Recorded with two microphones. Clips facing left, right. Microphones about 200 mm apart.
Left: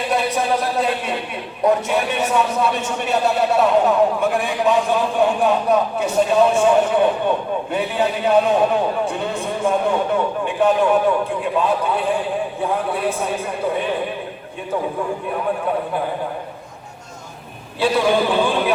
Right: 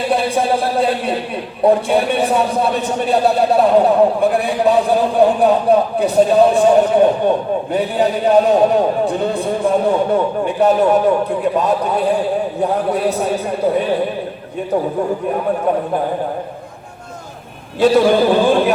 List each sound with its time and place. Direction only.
0.1 s a sound: 30° right (ahead or behind)
1.6 s a man's voice: 35° right (ahead or behind)
17.7 s a man's voice: 45° right (ahead or behind)